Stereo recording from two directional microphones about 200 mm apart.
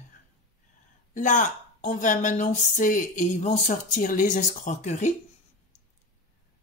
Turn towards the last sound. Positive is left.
turn(degrees=35)  # may be behind; listen again after turning